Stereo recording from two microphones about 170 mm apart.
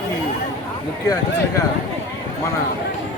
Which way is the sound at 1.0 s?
20° left (ahead or behind).